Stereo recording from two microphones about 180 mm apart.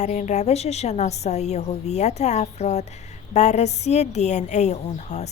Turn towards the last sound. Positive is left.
turn(degrees=40)  # may be behind; listen again after turning